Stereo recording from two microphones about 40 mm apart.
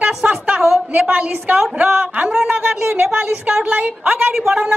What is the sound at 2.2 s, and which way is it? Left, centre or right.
Speech, centre.